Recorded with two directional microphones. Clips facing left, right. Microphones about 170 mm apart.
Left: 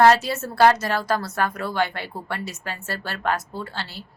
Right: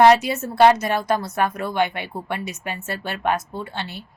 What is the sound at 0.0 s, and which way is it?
A woman's voice, 15° right (ahead or behind).